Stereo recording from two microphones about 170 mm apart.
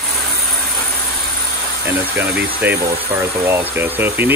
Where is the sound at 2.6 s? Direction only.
10° right (ahead or behind).